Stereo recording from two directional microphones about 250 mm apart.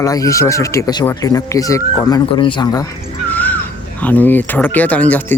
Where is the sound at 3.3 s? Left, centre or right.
Centre.